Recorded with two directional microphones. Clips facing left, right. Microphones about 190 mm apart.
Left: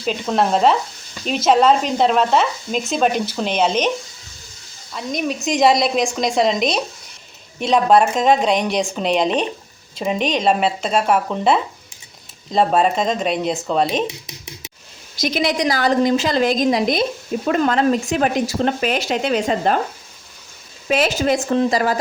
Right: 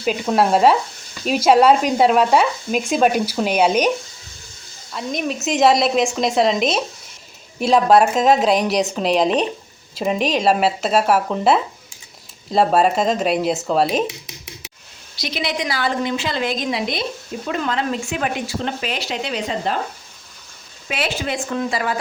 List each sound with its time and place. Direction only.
0.0 s stir: 5° right (ahead or behind)
4.9 s a woman's voice: centre (ahead or behind)
15.1 s a woman's voice: 45° left (ahead or behind)
20.8 s a woman's voice: 40° left (ahead or behind)